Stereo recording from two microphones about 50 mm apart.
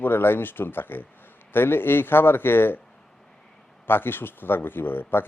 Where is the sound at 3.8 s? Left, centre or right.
Left.